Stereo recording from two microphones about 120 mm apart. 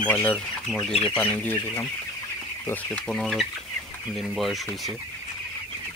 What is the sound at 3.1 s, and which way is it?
Speech, 5° left (ahead or behind).